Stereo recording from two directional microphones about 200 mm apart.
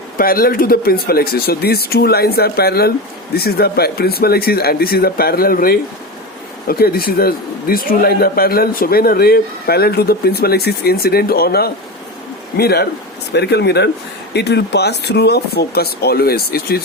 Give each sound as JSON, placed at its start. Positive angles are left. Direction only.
{"t": 0.2, "sound": "a man's voice", "side_deg": 45}